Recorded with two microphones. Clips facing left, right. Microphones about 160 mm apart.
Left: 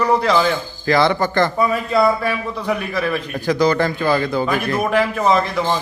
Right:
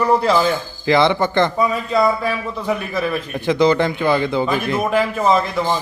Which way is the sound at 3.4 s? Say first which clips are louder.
Right 2 dB; 25° right (ahead or behind).